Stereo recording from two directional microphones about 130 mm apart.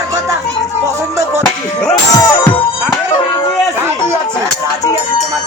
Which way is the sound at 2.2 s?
30° left (ahead or behind).